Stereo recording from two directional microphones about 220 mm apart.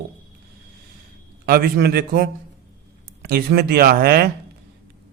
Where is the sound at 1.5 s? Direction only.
45° right (ahead or behind).